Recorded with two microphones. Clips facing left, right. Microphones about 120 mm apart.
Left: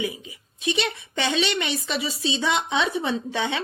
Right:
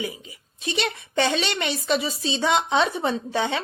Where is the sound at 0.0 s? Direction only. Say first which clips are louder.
Left 2 dB; 40° right (ahead or behind).